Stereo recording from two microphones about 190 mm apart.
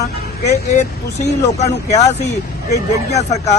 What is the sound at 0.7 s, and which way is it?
A man's voice, 35° left (ahead or behind).